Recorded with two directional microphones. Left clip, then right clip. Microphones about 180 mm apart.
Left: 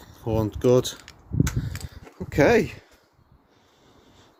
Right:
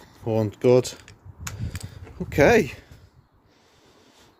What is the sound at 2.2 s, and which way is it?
Speech, 30° right (ahead or behind).